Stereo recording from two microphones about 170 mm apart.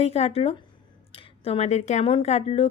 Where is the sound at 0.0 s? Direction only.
35° left (ahead or behind).